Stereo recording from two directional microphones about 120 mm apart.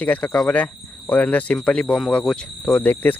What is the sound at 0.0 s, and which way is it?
Speech, 15° left (ahead or behind).